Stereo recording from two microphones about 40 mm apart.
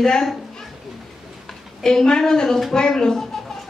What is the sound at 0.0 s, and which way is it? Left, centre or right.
Speech, centre.